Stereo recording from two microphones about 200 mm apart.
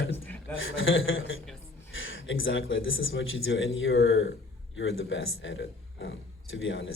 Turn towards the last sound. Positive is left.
turn(degrees=75)  # may be behind; listen again after turning